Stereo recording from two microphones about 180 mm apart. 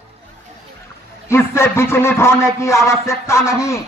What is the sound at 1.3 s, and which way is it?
A man's voice, 15° left (ahead or behind).